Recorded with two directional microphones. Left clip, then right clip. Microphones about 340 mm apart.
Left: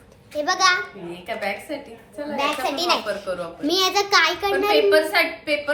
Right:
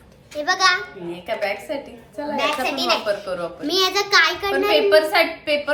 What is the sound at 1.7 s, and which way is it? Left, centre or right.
Speech, centre.